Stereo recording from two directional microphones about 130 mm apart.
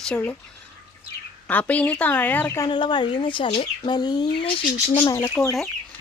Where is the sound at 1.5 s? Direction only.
10° left (ahead or behind).